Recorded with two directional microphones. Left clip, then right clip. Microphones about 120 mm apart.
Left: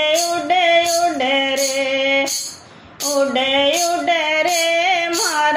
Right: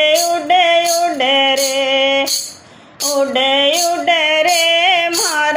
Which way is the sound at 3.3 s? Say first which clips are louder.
Right 5 dB; 50° right (ahead or behind).